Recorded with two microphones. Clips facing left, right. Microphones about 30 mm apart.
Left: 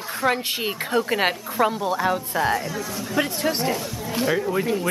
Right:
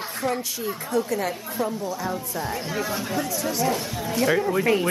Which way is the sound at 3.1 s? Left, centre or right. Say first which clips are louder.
Left 6 dB; left.